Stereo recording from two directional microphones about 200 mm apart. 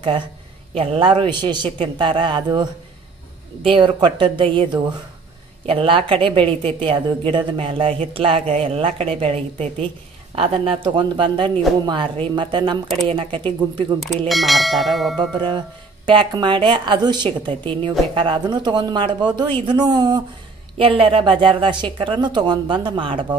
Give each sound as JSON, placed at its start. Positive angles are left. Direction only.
{"t": 0.7, "sound": "speech", "side_deg": -25}
{"t": 13.9, "sound": "speech", "side_deg": 0}
{"t": 15.3, "sound": "speech", "side_deg": -20}